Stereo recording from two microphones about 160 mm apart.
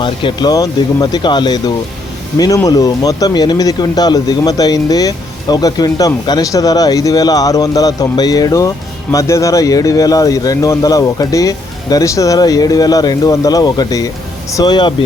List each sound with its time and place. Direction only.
0.0 s speech: 30° left (ahead or behind)